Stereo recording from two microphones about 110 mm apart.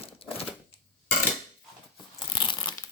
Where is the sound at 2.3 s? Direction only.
45° left (ahead or behind).